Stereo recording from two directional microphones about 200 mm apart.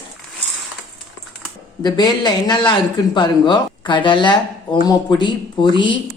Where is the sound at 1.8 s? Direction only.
20° left (ahead or behind).